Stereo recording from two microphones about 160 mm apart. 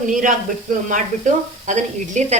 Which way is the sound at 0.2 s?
55° right (ahead or behind).